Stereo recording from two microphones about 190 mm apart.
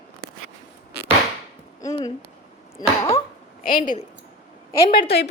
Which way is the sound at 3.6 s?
45° left (ahead or behind).